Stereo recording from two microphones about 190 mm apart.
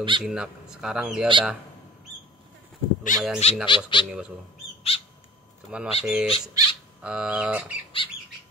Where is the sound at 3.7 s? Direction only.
25° left (ahead or behind).